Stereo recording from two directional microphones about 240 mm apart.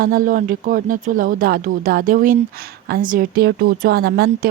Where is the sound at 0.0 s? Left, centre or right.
Right.